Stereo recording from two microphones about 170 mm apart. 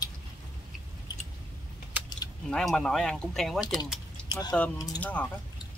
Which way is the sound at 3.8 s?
Centre (ahead or behind).